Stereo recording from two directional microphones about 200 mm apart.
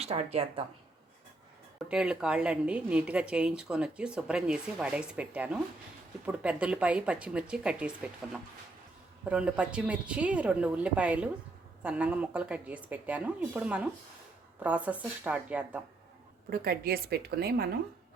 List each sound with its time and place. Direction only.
0.0 s speech: 30° right (ahead or behind)
1.9 s a woman's voice: 5° right (ahead or behind)
16.5 s a woman's voice: 50° right (ahead or behind)